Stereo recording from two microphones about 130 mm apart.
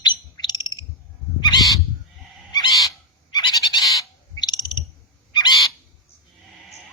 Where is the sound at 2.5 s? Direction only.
35° left (ahead or behind).